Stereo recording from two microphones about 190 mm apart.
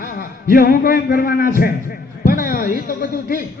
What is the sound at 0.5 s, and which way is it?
A man's voice, 50° left (ahead or behind).